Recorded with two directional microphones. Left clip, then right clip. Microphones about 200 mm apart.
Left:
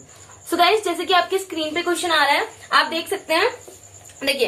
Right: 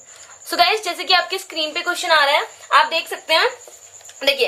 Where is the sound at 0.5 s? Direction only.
50° right (ahead or behind).